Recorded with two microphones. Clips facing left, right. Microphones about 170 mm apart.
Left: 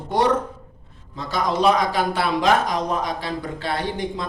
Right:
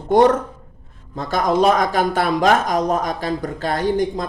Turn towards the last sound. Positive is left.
turn(degrees=-45)  # may be behind; listen again after turning